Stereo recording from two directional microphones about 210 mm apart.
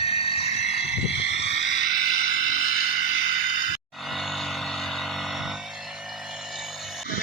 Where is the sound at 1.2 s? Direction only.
55° left (ahead or behind).